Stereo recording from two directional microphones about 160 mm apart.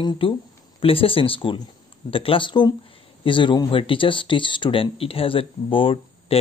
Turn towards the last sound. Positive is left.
turn(degrees=35)  # may be behind; listen again after turning